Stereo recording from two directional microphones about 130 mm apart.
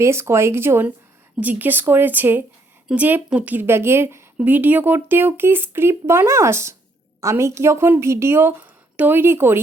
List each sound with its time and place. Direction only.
0.0 s speech: 20° right (ahead or behind)